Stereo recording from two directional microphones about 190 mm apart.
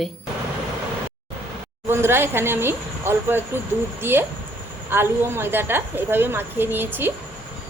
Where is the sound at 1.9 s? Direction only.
10° right (ahead or behind).